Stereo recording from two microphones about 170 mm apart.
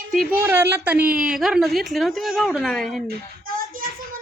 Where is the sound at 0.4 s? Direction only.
15° right (ahead or behind).